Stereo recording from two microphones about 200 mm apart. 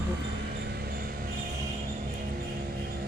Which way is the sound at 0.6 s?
50° right (ahead or behind).